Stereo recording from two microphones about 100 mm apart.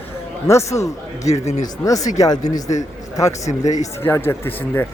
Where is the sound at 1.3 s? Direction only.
90° left.